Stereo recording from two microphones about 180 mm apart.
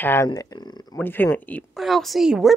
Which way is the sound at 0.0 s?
15° left (ahead or behind).